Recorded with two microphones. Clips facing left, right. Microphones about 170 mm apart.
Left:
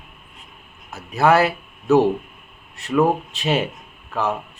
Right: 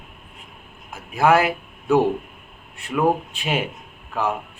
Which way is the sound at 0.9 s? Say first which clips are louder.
Left 1 dB; 15° right (ahead or behind).